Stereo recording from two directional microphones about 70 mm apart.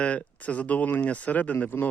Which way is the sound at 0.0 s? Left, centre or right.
Centre.